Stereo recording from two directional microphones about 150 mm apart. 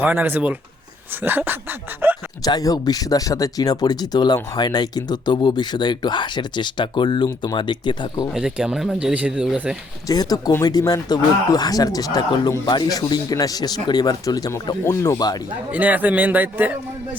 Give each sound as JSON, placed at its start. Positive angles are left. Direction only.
{"t": 0.0, "sound": "a man's voice", "side_deg": -10}
{"t": 2.4, "sound": "speech", "side_deg": 25}
{"t": 8.3, "sound": "speech", "side_deg": -5}
{"t": 10.1, "sound": "speech", "side_deg": 25}
{"t": 15.7, "sound": "a man's voice", "side_deg": -10}